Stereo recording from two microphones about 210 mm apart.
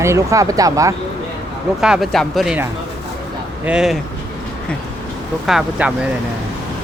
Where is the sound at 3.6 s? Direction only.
5° right (ahead or behind).